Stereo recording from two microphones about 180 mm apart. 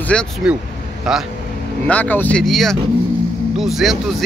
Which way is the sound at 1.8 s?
10° left (ahead or behind).